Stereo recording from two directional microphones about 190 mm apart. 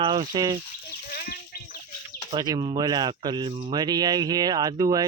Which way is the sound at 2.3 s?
20° right (ahead or behind).